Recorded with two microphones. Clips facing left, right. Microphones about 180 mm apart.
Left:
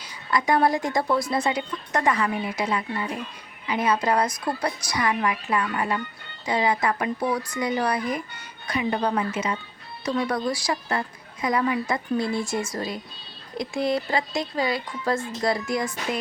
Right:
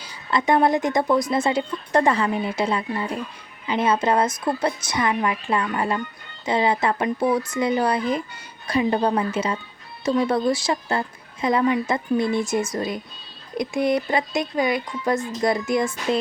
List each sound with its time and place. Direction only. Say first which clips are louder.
0.0 s speech: right 2 dB; 25° right (ahead or behind)